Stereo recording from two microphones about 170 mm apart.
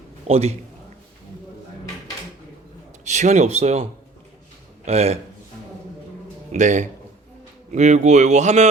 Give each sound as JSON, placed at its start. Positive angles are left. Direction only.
{"t": 0.3, "sound": "speech", "side_deg": -35}
{"t": 3.0, "sound": "speech", "side_deg": -45}
{"t": 4.9, "sound": "speech", "side_deg": -40}
{"t": 6.5, "sound": "speech", "side_deg": -45}